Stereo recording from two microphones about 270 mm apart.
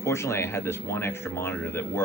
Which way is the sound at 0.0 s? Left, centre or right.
Centre.